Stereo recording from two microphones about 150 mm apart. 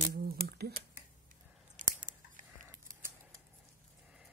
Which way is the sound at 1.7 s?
60° right (ahead or behind).